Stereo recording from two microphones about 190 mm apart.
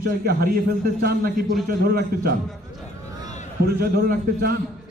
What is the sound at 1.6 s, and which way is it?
Speech, 55° right (ahead or behind).